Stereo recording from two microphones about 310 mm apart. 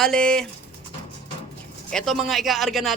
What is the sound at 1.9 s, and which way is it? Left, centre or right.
Speech, centre.